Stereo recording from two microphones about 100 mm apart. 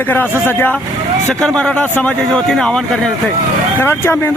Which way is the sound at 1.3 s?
5° left (ahead or behind).